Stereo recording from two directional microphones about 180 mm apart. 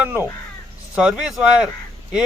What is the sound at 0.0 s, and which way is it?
A man's voice, 10° right (ahead or behind).